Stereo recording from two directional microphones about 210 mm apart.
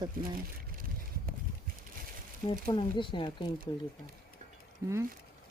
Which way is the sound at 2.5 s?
25° left (ahead or behind).